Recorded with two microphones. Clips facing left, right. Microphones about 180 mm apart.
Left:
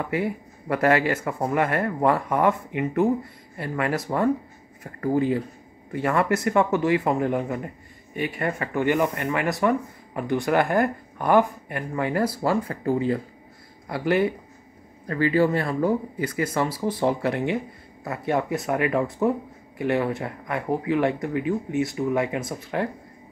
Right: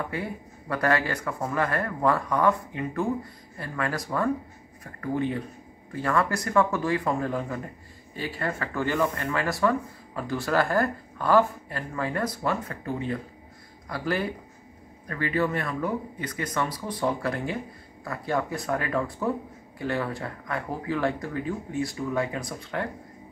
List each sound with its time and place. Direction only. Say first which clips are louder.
0.1 s speech: left 7 dB; 25° left (ahead or behind)